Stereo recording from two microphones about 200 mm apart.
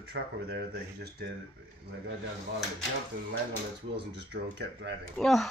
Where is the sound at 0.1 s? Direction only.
55° right (ahead or behind).